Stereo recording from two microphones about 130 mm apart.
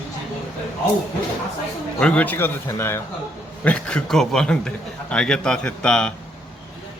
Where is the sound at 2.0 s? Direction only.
10° left (ahead or behind).